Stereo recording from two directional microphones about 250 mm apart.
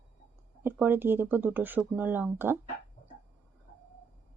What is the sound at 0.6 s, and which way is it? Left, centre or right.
Speech, centre.